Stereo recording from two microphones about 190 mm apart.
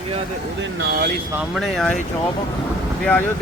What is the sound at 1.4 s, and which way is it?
Speech, centre (ahead or behind).